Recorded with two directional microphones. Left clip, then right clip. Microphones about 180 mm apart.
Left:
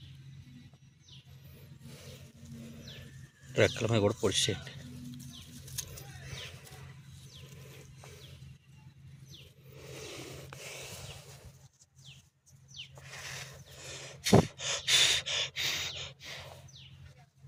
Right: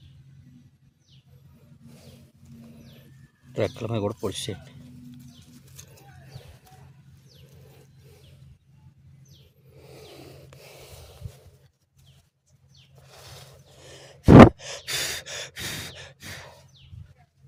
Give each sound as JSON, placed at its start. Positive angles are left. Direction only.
{"t": 3.5, "sound": "speech", "side_deg": -10}
{"t": 5.7, "sound": "vehicle", "side_deg": -20}
{"t": 9.7, "sound": "vehicle", "side_deg": -10}
{"t": 10.6, "sound": "snort", "side_deg": -10}
{"t": 13.1, "sound": "gasp", "side_deg": -30}
{"t": 14.6, "sound": "gasp", "side_deg": -40}